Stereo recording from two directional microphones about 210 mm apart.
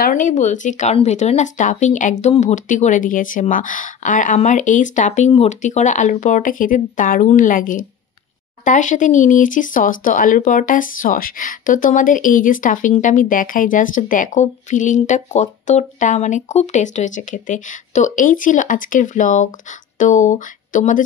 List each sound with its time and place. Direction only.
0.0 s speech: 40° left (ahead or behind)